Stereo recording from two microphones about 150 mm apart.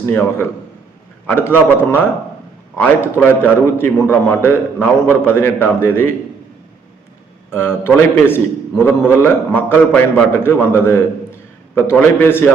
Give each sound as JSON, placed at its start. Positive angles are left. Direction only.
{"t": 0.0, "sound": "a man's voice", "side_deg": 15}
{"t": 7.5, "sound": "a man's voice", "side_deg": 15}